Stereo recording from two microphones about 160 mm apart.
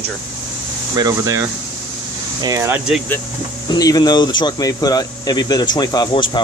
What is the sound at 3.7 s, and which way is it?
Speech, 25° left (ahead or behind).